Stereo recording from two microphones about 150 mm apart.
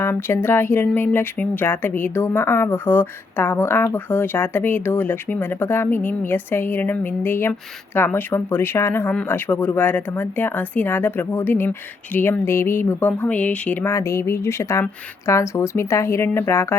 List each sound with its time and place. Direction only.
0.0 s speech: 15° left (ahead or behind)